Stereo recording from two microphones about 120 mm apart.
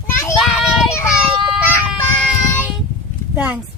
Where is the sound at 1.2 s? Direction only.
5° right (ahead or behind).